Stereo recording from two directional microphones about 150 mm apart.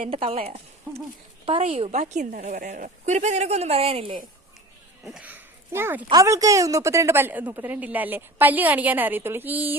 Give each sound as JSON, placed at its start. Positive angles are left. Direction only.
{"t": 0.0, "sound": "a woman's voice", "side_deg": -40}
{"t": 5.0, "sound": "a woman's voice", "side_deg": -5}